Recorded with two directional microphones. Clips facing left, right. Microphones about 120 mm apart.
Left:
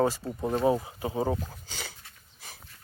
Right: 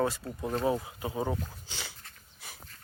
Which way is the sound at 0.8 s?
25° left (ahead or behind).